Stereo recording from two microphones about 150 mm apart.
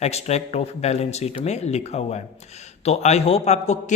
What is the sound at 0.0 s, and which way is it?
A man's voice, 45° left (ahead or behind).